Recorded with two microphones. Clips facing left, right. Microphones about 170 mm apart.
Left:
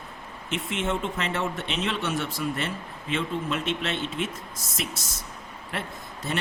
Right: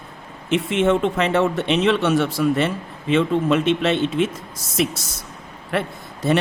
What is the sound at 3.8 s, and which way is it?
Speech, 75° right (ahead or behind).